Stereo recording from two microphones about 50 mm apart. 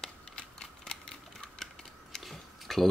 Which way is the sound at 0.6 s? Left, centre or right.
Centre.